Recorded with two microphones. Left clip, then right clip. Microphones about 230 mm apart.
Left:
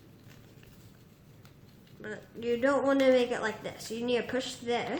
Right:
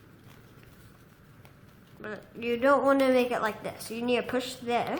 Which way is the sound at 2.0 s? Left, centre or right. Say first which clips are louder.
Right 1 dB; right.